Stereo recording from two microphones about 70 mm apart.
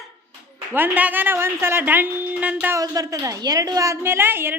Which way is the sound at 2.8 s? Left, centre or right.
Right.